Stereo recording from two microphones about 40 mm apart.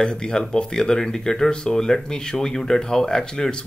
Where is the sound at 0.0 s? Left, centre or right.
Centre.